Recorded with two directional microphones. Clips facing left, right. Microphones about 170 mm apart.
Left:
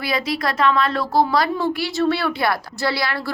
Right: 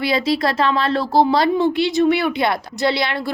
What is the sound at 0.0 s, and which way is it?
A woman's voice, 25° right (ahead or behind).